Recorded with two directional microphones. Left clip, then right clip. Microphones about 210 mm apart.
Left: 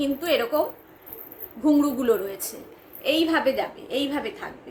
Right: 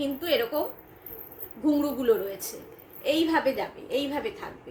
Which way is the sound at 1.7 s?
20° left (ahead or behind).